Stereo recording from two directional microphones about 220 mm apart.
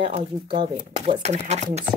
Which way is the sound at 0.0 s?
25° right (ahead or behind).